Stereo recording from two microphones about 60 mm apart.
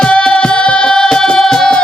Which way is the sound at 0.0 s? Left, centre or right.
Centre.